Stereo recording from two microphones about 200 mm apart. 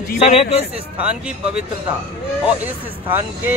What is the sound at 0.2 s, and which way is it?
Speech, 30° left (ahead or behind).